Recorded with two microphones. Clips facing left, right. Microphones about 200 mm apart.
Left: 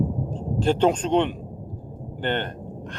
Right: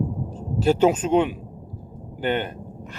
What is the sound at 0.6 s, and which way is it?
A man's voice, 5° right (ahead or behind).